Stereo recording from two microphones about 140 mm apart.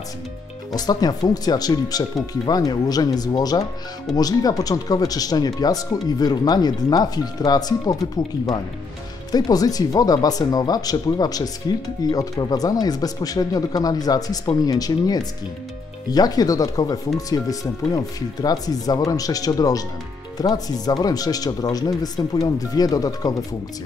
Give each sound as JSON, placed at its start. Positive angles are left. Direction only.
{"t": 0.7, "sound": "speech", "side_deg": 30}
{"t": 9.3, "sound": "speech", "side_deg": 25}